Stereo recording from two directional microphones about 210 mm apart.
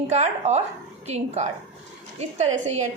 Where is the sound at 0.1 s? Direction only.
35° right (ahead or behind).